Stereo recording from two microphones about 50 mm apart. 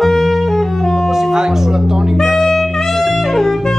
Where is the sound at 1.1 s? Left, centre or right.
Centre.